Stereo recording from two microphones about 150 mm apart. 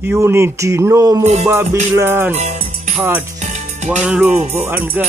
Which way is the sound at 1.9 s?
15° right (ahead or behind).